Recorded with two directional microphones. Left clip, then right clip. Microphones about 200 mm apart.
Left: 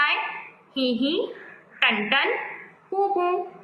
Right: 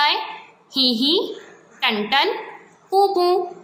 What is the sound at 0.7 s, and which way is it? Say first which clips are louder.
Speech: right 6 dB; 35° right (ahead or behind).